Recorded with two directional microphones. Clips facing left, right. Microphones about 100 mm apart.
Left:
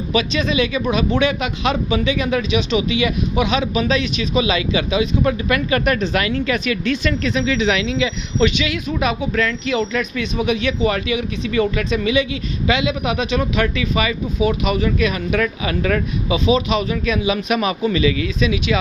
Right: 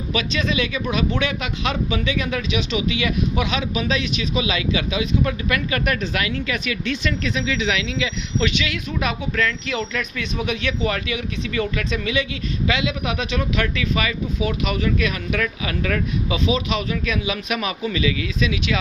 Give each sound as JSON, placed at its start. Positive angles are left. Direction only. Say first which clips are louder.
{"t": 0.1, "sound": "speech", "louder": "left 4 dB", "side_deg": 20}
{"t": 3.8, "sound": "speech", "louder": "left 4 dB", "side_deg": 40}
{"t": 18.4, "sound": "speech", "louder": "left 4 dB", "side_deg": 15}